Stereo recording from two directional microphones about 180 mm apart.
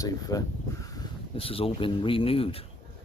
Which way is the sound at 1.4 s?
30° left (ahead or behind).